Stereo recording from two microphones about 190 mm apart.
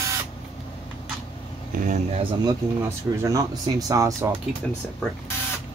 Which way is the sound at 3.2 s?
15° right (ahead or behind).